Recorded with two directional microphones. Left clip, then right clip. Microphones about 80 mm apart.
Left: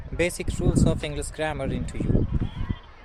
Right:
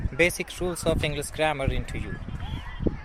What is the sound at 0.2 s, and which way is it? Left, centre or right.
Speech, left.